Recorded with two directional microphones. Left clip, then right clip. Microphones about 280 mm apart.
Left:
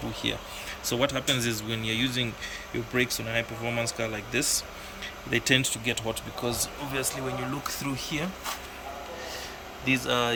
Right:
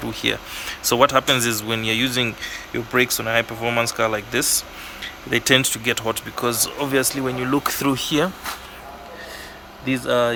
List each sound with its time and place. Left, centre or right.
0.1 s speech: centre
7.0 s speech: centre
9.8 s speech: centre